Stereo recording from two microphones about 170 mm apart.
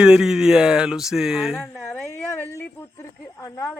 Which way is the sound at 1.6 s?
10° left (ahead or behind).